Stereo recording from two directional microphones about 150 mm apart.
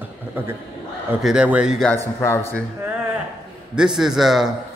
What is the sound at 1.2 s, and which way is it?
Speech, 5° right (ahead or behind).